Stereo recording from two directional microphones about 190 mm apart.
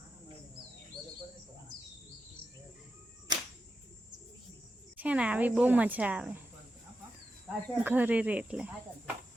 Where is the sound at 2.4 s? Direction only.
30° right (ahead or behind).